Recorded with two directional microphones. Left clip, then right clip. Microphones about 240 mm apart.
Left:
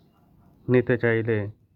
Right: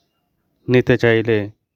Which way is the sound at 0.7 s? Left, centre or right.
Right.